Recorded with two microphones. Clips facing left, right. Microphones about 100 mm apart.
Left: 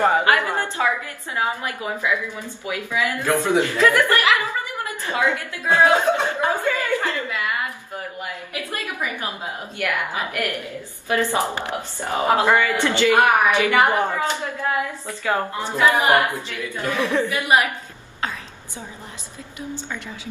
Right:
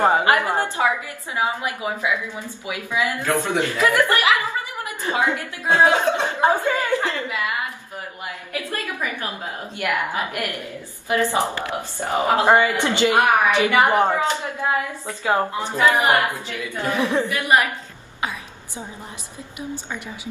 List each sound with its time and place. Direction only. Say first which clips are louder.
0.0 s a woman's voice: right 1 dB; 20° right (ahead or behind)
3.3 s a man's voice: left 5 dB; 15° left (ahead or behind)
3.7 s a woman's voice: left 1 dB; 15° right (ahead or behind)
8.6 s a man's voice: right 1 dB; 20° left (ahead or behind)
9.8 s a woman's voice: right 2 dB; 20° right (ahead or behind)
17.3 s a man's voice: even; 15° left (ahead or behind)